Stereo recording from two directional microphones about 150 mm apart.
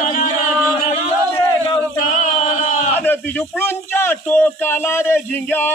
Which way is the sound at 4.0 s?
15° left (ahead or behind).